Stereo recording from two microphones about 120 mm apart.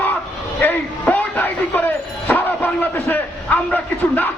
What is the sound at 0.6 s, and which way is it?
Bow-wow, 15° left (ahead or behind).